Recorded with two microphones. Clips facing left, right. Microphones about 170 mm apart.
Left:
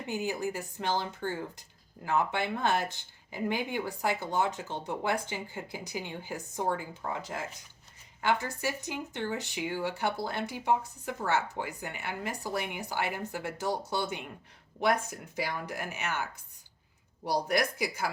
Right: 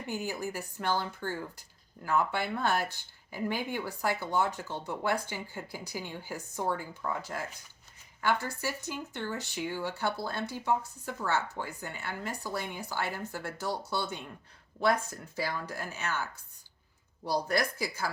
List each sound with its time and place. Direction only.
0.0 s a woman's voice: 20° left (ahead or behind)